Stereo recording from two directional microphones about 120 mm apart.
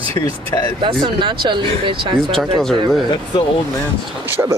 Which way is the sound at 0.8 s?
40° right (ahead or behind).